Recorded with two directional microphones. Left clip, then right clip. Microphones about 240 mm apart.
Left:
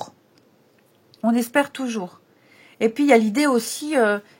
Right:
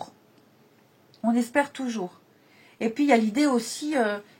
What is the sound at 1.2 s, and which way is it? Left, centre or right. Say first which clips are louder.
Speech: left 4 dB; left.